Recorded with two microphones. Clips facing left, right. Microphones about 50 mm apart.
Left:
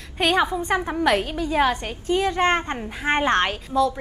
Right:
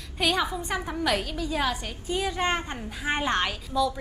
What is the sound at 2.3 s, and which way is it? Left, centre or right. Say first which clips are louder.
A woman's voice: left 6 dB; left.